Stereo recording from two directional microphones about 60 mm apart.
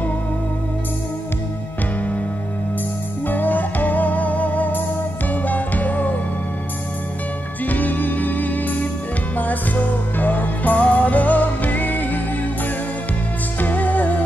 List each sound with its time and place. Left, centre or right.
3.3 s music: left
7.6 s music: left
13.6 s music: left